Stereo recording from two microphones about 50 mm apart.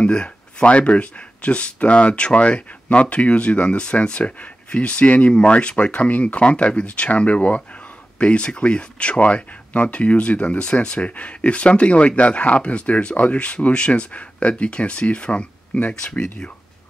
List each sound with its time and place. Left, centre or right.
0.0 s speech: left